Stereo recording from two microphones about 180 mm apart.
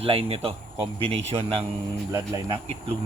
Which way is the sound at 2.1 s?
20° right (ahead or behind).